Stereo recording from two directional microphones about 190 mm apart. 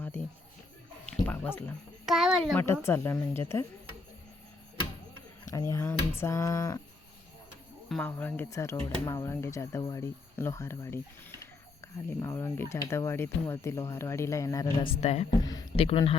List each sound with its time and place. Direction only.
1.2 s speech: 10° left (ahead or behind)
2.0 s a child's voice: centre (ahead or behind)
2.8 s speech: 15° left (ahead or behind)
5.5 s speech: 15° left (ahead or behind)
7.9 s speech: 5° left (ahead or behind)
12.2 s a man's voice: 15° left (ahead or behind); by 16.1 s 30° left (ahead or behind)